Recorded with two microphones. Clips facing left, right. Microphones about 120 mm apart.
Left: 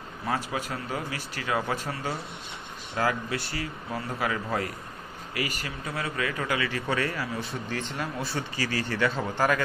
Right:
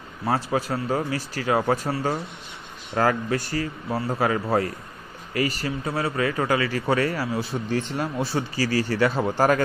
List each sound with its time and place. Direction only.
0.3 s speech: 40° right (ahead or behind)